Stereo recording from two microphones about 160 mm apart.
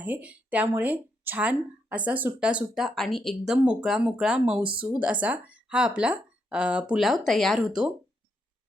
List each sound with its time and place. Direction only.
0.0 s speech: 10° right (ahead or behind)
4.6 s speech: 30° right (ahead or behind)
4.9 s speech: 10° right (ahead or behind)